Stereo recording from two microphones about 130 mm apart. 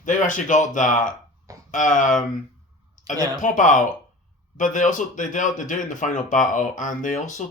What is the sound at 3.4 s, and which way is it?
Speech, 80° left.